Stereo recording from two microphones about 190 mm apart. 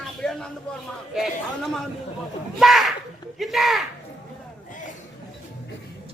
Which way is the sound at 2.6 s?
Centre (ahead or behind).